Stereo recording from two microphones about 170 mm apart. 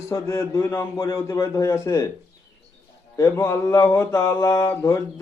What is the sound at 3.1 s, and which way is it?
A man's voice, 15° left (ahead or behind).